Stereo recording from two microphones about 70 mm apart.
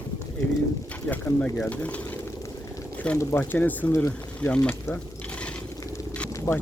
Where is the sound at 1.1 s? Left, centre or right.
Left.